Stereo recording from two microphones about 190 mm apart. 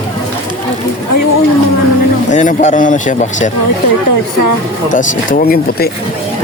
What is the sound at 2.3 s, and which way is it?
A man's voice, 40° left (ahead or behind).